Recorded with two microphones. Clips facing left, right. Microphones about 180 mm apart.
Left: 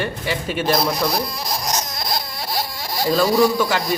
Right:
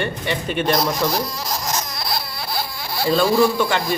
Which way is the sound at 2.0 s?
45° left (ahead or behind).